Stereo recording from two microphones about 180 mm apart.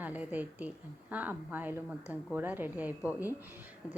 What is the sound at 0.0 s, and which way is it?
A woman's voice, 10° right (ahead or behind).